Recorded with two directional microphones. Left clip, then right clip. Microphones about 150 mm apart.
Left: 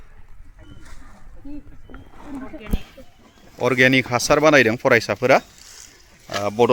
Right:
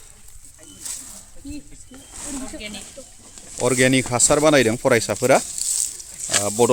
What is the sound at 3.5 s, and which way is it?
Speech, centre (ahead or behind).